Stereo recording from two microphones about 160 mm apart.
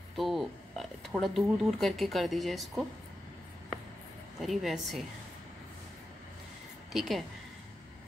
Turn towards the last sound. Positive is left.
turn(degrees=0)  # may be behind; listen again after turning